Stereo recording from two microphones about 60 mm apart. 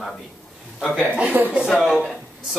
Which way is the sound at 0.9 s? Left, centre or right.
Centre.